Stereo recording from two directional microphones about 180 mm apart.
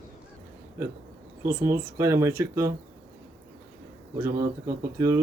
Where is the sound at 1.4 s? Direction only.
15° right (ahead or behind).